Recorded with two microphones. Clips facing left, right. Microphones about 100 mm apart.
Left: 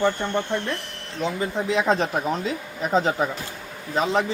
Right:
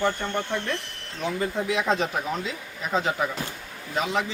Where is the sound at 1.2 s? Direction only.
25° left (ahead or behind).